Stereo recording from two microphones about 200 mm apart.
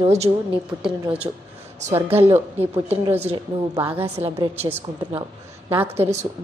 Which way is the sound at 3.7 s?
10° right (ahead or behind).